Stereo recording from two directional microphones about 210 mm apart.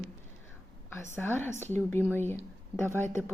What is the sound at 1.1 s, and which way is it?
A woman's voice, 10° left (ahead or behind).